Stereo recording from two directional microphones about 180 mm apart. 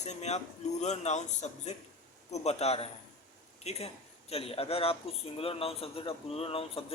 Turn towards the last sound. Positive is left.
turn(degrees=30)  # may be behind; listen again after turning